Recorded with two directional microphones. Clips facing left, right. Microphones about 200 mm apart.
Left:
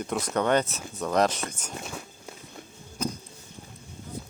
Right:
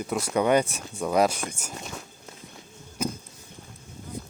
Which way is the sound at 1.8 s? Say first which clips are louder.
Left 3 dB; centre (ahead or behind).